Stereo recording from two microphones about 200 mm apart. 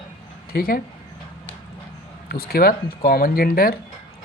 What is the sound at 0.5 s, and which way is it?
Speech, 50° left (ahead or behind).